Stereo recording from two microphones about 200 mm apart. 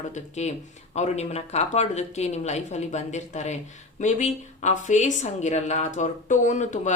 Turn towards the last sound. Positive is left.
turn(degrees=35)  # may be behind; listen again after turning